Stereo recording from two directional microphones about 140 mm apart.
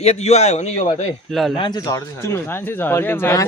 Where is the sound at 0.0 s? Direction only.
50° left (ahead or behind).